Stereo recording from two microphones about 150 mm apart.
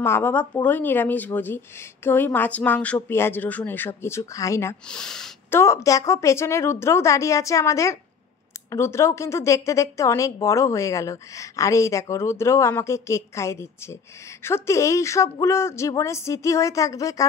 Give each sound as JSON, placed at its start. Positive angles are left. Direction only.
{"t": 0.0, "sound": "a woman's voice", "side_deg": 15}
{"t": 4.8, "sound": "speech", "side_deg": 5}
{"t": 5.5, "sound": "speech", "side_deg": 20}